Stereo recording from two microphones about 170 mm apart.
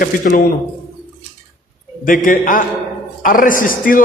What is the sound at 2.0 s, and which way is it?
A man's voice, 55° left (ahead or behind).